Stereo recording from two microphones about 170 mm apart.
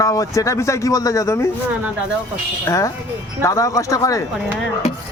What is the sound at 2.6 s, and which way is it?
A man's voice, 20° left (ahead or behind).